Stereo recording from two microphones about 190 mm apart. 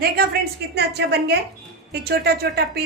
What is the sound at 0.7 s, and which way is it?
A woman's voice, 60° right (ahead or behind).